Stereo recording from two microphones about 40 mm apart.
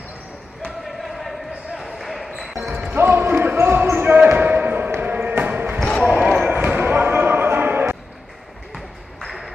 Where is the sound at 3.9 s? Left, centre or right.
Right.